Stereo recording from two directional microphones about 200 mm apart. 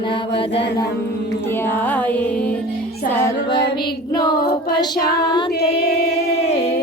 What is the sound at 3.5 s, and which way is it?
A woman's voice, 20° left (ahead or behind).